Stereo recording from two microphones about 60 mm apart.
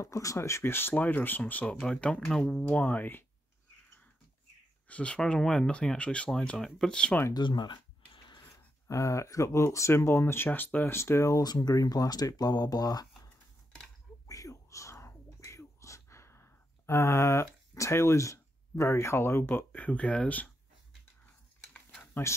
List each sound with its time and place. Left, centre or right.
0.0 s speech: left
0.9 s speech: left
2.6 s speech: left
4.8 s speech: left
5.2 s speech: centre
6.6 s speech: centre
8.8 s speech: left
11.0 s speech: left
14.2 s whispering: left
19.7 s speech: left
22.0 s a sound: left